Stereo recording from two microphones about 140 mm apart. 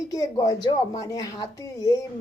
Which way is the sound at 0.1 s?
25° left (ahead or behind).